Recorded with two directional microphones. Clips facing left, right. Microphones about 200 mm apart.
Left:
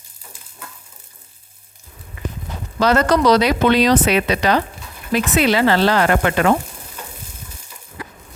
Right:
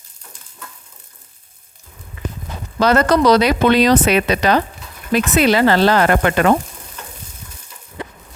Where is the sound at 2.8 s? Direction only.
50° right (ahead or behind).